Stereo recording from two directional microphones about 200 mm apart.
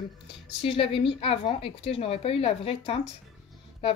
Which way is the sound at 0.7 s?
25° left (ahead or behind).